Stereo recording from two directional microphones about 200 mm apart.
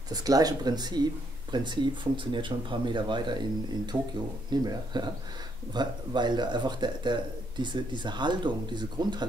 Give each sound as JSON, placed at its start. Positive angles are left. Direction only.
{"t": 0.1, "sound": "speech", "side_deg": -20}